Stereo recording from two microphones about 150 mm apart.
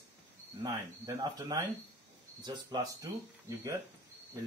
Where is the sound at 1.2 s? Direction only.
25° right (ahead or behind).